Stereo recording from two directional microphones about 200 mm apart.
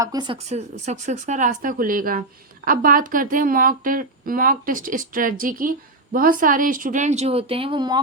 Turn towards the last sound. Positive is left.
turn(degrees=-25)  # may be behind; listen again after turning